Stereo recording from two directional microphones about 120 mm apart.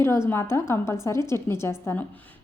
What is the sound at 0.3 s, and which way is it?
A woman's voice, 20° left (ahead or behind).